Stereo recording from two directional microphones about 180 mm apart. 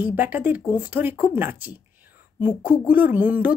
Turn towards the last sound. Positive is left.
turn(degrees=-10)  # may be behind; listen again after turning